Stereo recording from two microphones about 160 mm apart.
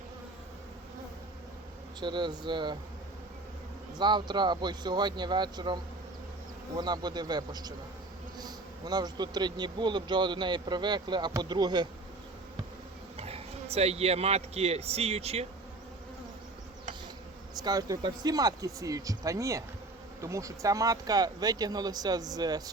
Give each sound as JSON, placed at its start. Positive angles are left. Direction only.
{"t": 2.0, "sound": "speech", "side_deg": -30}
{"t": 3.9, "sound": "speech", "side_deg": -25}
{"t": 13.1, "sound": "speech", "side_deg": -40}
{"t": 17.6, "sound": "speech", "side_deg": -25}